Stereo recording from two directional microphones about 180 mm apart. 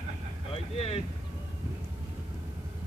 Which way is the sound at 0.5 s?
30° left (ahead or behind).